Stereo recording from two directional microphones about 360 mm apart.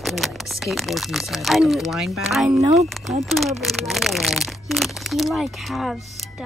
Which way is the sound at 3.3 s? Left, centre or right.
Centre.